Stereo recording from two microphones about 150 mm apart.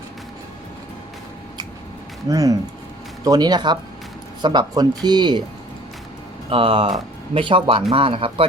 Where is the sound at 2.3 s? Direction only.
25° right (ahead or behind).